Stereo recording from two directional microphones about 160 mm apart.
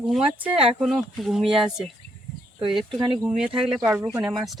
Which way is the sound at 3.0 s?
25° right (ahead or behind).